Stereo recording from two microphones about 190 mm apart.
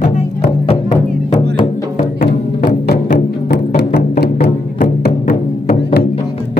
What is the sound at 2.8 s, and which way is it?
Music, 55° left (ahead or behind).